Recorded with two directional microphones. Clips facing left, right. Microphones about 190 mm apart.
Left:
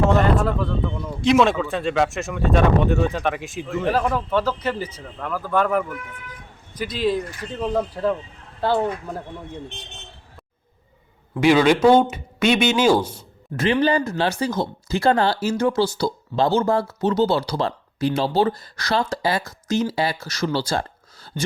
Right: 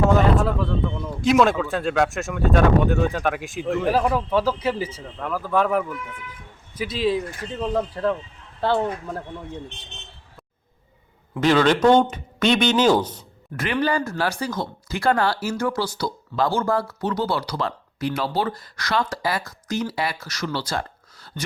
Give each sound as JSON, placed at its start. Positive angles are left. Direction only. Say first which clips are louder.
{"t": 0.1, "sound": "speech", "louder": "even", "side_deg": 0}
{"t": 11.3, "sound": "speech", "louder": "left 2 dB", "side_deg": 10}
{"t": 13.6, "sound": "speech", "louder": "left 4 dB", "side_deg": 25}